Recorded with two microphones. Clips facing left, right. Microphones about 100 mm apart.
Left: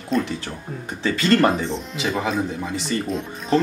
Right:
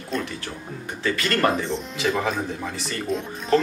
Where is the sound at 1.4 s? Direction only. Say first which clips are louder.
Left 3 dB; centre (ahead or behind).